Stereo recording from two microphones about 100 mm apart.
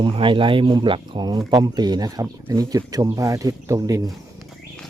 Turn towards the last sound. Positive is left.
turn(degrees=-30)  # may be behind; listen again after turning